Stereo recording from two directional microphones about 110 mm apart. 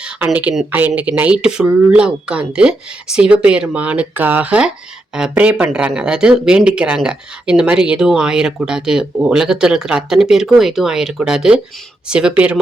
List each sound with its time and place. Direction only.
0.5 s speech: 30° right (ahead or behind)
0.9 s speech: 15° right (ahead or behind)